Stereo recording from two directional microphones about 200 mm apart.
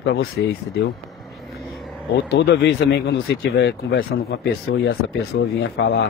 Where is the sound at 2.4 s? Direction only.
60° left (ahead or behind).